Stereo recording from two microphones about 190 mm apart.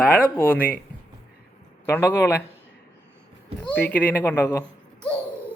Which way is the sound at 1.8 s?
10° left (ahead or behind).